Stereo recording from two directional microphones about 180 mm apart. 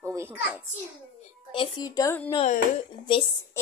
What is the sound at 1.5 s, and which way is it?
Speech, 25° left (ahead or behind).